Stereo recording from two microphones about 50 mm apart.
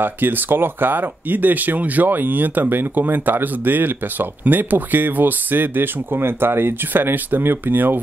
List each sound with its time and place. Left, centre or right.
0.0 s speech: right